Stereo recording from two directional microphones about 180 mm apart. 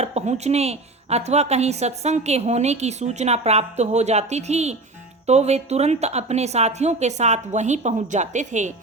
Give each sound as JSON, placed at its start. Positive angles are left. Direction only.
{"t": 0.0, "sound": "a woman's voice", "side_deg": -35}